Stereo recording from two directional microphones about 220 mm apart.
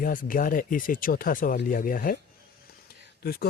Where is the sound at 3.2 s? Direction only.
45° left (ahead or behind).